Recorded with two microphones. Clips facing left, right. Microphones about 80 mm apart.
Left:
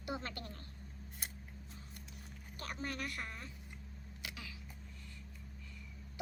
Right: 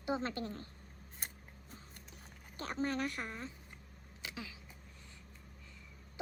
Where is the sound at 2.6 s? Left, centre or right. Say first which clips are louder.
Right 6 dB; right.